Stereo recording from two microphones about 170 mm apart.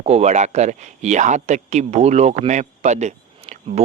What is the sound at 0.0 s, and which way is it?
Speech, 40° right (ahead or behind).